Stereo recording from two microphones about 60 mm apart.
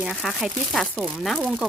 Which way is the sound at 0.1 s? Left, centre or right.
Centre.